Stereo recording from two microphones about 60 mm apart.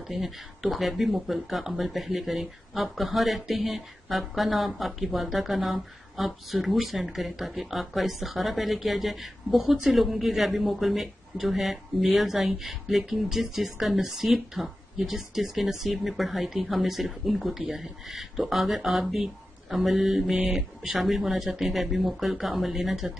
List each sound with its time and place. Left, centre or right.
0.1 s speech: centre